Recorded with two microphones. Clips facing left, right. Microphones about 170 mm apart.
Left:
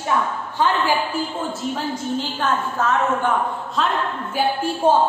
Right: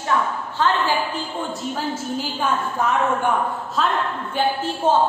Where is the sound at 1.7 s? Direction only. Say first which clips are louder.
Left 2 dB; 10° right (ahead or behind).